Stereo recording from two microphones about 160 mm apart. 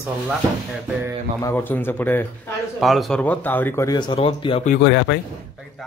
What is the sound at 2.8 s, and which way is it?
Speech, centre (ahead or behind).